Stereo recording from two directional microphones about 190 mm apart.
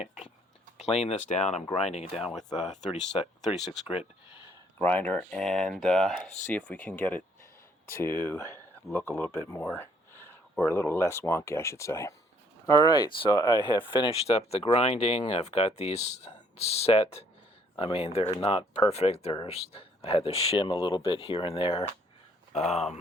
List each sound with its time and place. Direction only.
0.0 s a sound: 40° left (ahead or behind)
0.8 s speech: 35° left (ahead or behind)
3.2 s speech: 5° right (ahead or behind)
4.8 s speech: 10° left (ahead or behind)
9.7 s a sound: 10° left (ahead or behind)
10.7 s speech: 10° left (ahead or behind); by 23.0 s 35° left (ahead or behind)